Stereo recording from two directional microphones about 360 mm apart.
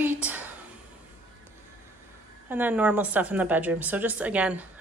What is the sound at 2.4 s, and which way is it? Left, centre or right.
A woman's voice, centre.